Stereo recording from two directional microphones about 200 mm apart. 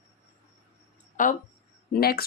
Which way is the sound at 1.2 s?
40° left (ahead or behind).